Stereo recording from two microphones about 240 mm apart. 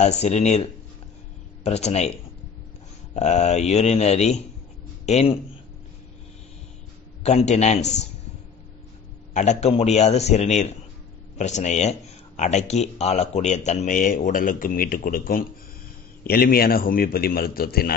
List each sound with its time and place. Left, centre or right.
0.0 s speech: left
1.6 s speech: left
3.2 s speech: left
7.2 s speech: left
9.3 s a man's voice: left